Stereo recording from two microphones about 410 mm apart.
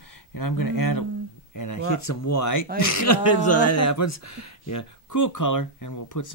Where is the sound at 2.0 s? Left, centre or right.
Left.